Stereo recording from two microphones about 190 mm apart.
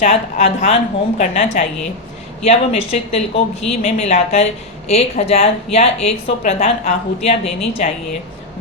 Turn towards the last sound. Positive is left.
turn(degrees=30)  # may be behind; listen again after turning